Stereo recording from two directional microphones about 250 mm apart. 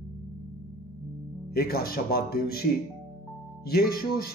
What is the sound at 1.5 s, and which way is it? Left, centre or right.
Speech, left.